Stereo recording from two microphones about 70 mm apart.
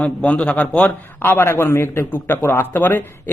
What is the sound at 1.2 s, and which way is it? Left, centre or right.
A man's voice, left.